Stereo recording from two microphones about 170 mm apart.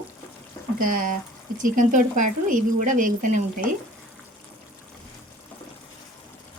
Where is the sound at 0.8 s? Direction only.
50° right (ahead or behind).